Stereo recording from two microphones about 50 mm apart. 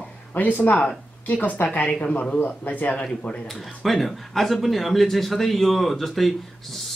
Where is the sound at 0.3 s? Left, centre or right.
Left.